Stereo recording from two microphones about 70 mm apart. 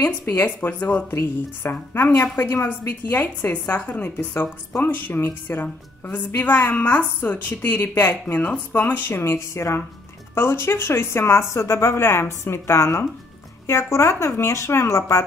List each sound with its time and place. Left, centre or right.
0.0 s speech: left
1.1 s a woman's voice: left